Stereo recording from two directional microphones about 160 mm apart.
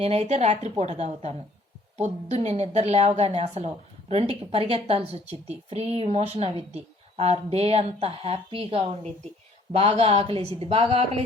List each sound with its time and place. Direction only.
0.0 s a woman's voice: 40° right (ahead or behind)